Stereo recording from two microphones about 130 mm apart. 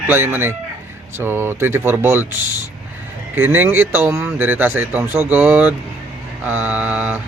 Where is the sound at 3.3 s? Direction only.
15° right (ahead or behind).